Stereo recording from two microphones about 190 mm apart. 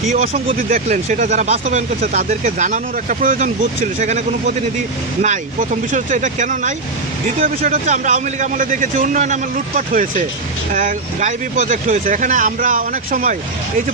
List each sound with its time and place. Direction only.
0.1 s speech: 35° right (ahead or behind)